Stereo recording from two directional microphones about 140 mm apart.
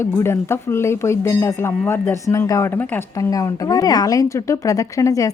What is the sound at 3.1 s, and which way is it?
A woman's voice, 25° left (ahead or behind).